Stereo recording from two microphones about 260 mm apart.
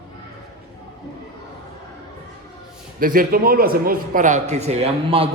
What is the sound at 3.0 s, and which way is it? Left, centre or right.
A man's voice, right.